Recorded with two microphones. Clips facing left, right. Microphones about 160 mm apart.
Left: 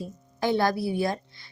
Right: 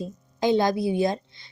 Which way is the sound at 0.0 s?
20° right (ahead or behind).